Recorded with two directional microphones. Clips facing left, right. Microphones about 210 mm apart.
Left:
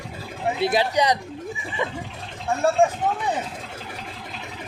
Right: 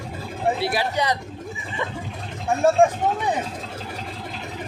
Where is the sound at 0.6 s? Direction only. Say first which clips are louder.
Left 3 dB; 20° left (ahead or behind).